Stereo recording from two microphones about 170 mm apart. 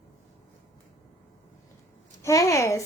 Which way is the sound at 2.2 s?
20° left (ahead or behind).